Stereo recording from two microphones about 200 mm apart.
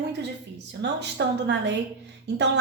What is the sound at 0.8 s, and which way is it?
Speech, 60° right (ahead or behind).